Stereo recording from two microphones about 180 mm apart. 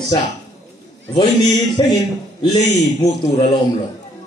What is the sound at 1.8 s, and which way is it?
Speech, 25° left (ahead or behind).